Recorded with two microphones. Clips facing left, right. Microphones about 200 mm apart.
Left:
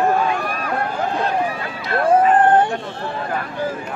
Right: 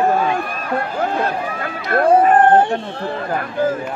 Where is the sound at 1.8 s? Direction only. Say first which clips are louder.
Right 2 dB; 50° right (ahead or behind).